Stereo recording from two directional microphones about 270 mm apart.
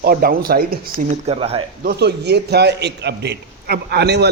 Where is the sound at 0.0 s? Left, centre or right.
Right.